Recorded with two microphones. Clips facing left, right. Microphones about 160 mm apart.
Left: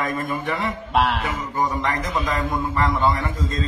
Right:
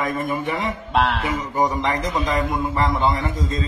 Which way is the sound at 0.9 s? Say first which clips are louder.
Even; centre (ahead or behind).